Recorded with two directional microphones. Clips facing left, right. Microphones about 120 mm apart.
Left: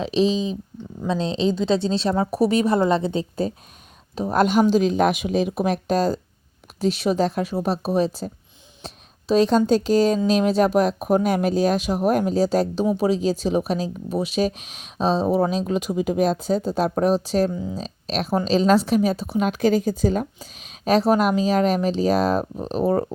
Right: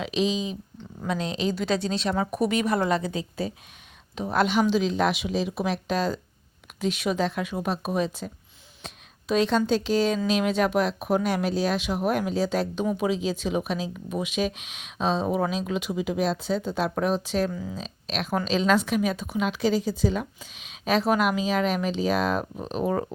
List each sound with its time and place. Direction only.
0.0 s a woman's voice: 35° left (ahead or behind)
17.5 s a woman's voice: 25° left (ahead or behind)
17.7 s speech: 40° left (ahead or behind)